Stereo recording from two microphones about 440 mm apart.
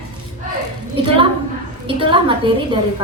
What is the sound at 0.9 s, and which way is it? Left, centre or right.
A woman's voice, centre.